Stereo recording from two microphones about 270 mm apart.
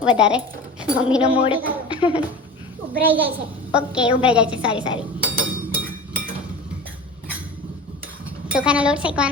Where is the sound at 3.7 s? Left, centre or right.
Centre.